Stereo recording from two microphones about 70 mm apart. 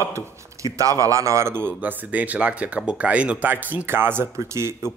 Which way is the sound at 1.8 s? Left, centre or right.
Right.